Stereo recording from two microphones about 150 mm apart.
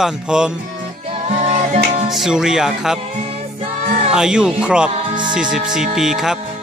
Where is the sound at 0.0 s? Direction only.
5° right (ahead or behind).